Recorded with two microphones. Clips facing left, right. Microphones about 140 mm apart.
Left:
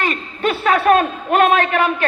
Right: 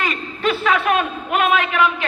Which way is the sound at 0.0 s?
50° left (ahead or behind).